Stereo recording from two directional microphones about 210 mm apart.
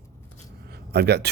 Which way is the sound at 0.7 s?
50° right (ahead or behind).